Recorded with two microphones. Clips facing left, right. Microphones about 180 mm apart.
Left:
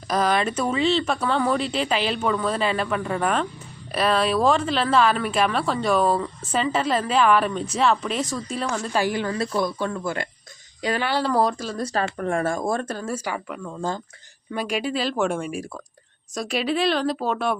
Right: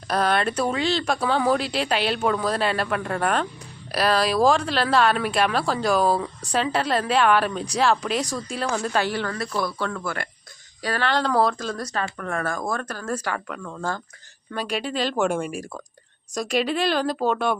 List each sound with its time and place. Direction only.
0.1 s speech: centre (ahead or behind)
9.0 s speech: 15° left (ahead or behind)
11.1 s speech: 5° left (ahead or behind)
12.1 s speech: 30° left (ahead or behind)
13.1 s speech: 10° left (ahead or behind)